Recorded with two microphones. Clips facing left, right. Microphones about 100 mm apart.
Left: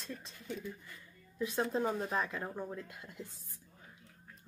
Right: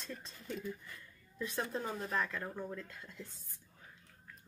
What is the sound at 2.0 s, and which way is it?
A woman's voice, 15° left (ahead or behind).